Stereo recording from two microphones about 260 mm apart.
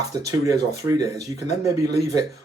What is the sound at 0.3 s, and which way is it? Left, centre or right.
Speech, centre.